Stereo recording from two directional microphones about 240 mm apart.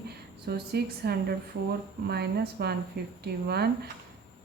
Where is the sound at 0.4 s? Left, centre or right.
Right.